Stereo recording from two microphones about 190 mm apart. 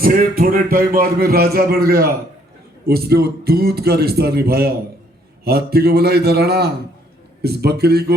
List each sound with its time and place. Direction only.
0.0 s a man's voice: 50° right (ahead or behind)